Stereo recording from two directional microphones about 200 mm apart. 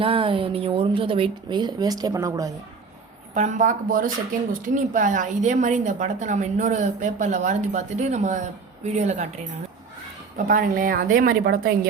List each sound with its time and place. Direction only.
0.0 s a woman's voice: 25° right (ahead or behind)
3.3 s a woman's voice: 40° right (ahead or behind)